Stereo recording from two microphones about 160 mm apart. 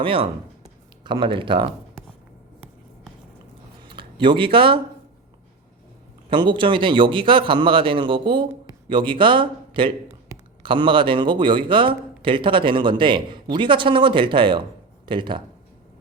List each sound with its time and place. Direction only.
0.0 s speech: 35° right (ahead or behind)
3.8 s speech: 30° right (ahead or behind)
6.3 s a man's voice: 30° right (ahead or behind)